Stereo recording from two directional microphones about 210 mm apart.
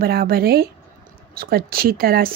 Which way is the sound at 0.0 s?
45° right (ahead or behind).